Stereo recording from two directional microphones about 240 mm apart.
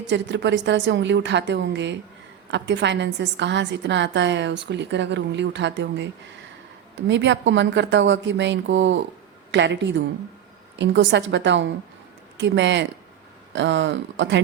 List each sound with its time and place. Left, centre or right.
0.1 s a woman's voice: right